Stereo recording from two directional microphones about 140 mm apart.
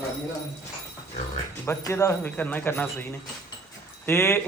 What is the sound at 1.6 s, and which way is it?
Speech, 20° left (ahead or behind).